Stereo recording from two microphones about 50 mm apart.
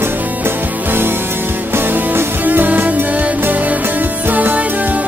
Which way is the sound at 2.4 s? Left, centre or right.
Right.